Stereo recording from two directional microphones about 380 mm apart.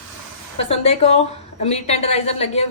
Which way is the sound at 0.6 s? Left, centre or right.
Centre.